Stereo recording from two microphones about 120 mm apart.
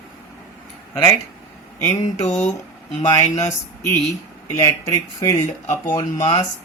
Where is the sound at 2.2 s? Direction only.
90° left.